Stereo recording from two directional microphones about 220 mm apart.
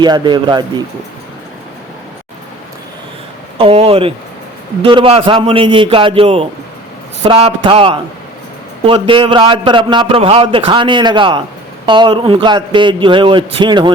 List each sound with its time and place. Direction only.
0.0 s a man's voice: 20° right (ahead or behind)
3.6 s a man's voice: 25° right (ahead or behind)